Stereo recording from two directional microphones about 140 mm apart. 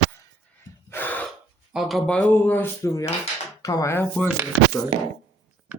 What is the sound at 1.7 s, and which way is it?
Speech, centre (ahead or behind).